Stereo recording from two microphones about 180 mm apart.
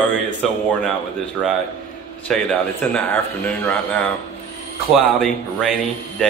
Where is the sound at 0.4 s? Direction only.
Centre (ahead or behind).